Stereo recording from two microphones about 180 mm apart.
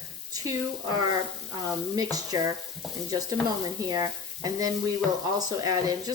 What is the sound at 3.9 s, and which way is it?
Frying, 20° right (ahead or behind).